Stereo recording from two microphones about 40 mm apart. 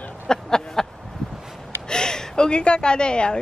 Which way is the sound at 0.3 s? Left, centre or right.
Centre.